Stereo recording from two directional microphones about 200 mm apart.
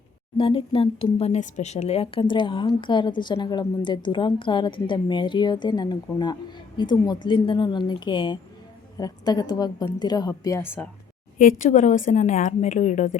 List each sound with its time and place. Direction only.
0.3 s speech: 25° left (ahead or behind); by 10.8 s 10° left (ahead or behind)
11.3 s a woman's voice: 40° left (ahead or behind)